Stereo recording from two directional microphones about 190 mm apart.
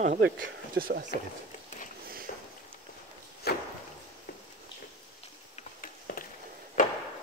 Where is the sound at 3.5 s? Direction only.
55° left (ahead or behind).